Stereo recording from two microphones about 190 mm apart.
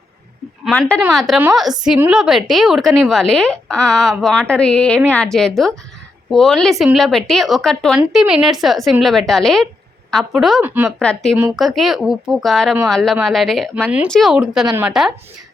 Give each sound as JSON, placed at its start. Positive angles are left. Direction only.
{"t": 0.6, "sound": "a woman's voice", "side_deg": 5}